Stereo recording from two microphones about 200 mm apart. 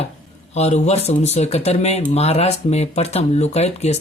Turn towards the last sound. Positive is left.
turn(degrees=35)  # may be behind; listen again after turning